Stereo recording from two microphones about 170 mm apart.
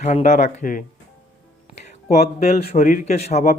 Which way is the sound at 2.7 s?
45° left (ahead or behind).